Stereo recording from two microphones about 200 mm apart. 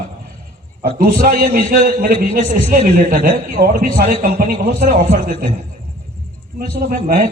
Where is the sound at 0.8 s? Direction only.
50° right (ahead or behind).